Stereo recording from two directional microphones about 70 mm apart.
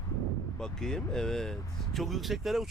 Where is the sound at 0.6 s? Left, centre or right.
Centre.